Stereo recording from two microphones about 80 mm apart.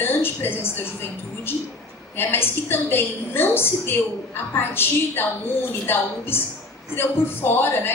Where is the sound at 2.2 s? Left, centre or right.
Left.